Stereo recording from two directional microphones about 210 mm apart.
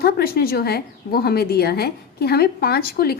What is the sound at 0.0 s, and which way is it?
A woman's voice, 45° left (ahead or behind).